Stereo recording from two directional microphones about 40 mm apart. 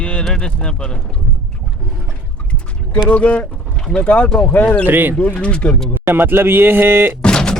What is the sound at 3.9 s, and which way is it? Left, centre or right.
Speech, left.